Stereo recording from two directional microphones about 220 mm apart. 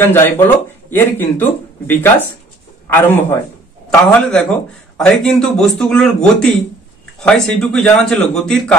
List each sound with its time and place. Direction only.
0.0 s a man's voice: 10° left (ahead or behind)